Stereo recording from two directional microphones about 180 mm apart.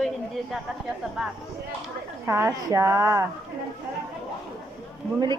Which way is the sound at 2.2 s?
15° right (ahead or behind).